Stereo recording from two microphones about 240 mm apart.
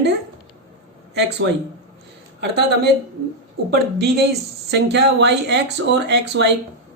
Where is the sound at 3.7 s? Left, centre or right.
Right.